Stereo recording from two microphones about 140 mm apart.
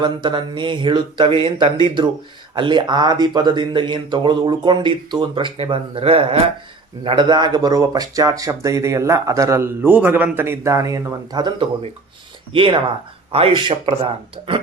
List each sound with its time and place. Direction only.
0.0 s speech: 35° right (ahead or behind)